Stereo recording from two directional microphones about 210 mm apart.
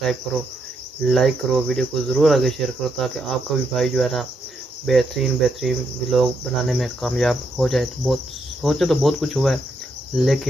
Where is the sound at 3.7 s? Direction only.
Centre (ahead or behind).